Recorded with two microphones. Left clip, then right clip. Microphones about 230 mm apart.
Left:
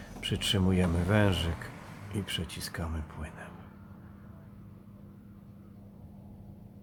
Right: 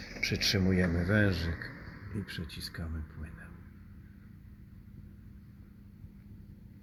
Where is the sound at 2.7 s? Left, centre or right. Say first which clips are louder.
Left 6 dB; centre.